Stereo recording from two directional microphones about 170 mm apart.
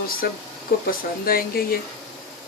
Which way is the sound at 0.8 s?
60° left (ahead or behind).